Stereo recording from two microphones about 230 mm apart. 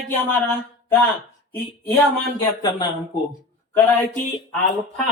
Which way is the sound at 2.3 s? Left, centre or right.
Centre.